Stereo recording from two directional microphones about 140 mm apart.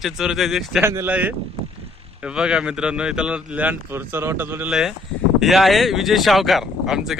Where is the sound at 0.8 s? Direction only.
15° right (ahead or behind).